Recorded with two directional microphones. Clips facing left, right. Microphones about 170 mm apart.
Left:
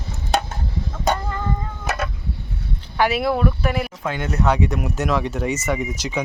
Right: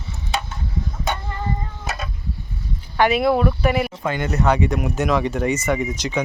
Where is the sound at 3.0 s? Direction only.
Centre (ahead or behind).